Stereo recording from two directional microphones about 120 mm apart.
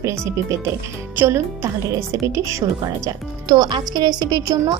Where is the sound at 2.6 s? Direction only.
35° right (ahead or behind).